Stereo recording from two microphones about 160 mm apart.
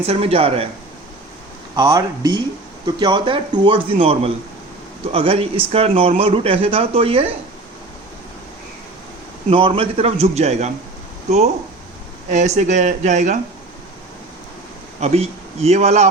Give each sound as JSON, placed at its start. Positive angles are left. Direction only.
{"t": 0.1, "sound": "speech", "side_deg": -40}
{"t": 1.7, "sound": "speech", "side_deg": -20}
{"t": 9.5, "sound": "speech", "side_deg": -35}
{"t": 15.0, "sound": "speech", "side_deg": -40}